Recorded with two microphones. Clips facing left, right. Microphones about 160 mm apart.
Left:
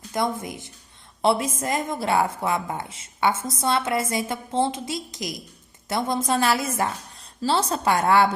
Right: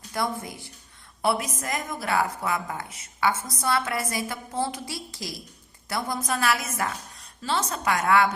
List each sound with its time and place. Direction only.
0.1 s a woman's voice: 20° left (ahead or behind)